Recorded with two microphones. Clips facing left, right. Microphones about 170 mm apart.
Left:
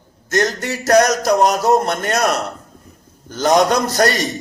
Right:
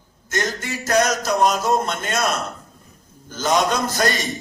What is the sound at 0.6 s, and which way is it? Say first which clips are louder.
Music: left 5 dB; 70° left (ahead or behind).